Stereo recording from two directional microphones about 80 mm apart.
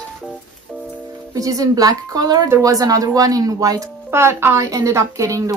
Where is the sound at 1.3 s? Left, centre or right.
Right.